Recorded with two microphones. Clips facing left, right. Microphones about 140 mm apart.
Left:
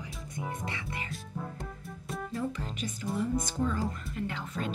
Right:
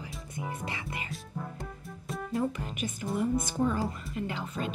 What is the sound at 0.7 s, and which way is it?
Speech, 20° right (ahead or behind).